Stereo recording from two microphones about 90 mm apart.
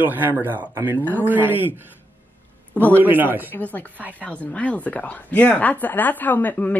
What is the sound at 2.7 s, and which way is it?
Speech, 20° left (ahead or behind).